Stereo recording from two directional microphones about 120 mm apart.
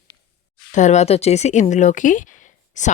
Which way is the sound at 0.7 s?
75° left (ahead or behind).